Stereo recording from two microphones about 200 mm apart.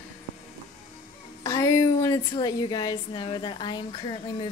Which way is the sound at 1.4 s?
15° left (ahead or behind).